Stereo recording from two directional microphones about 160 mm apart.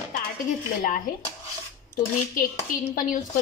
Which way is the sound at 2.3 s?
60° left (ahead or behind).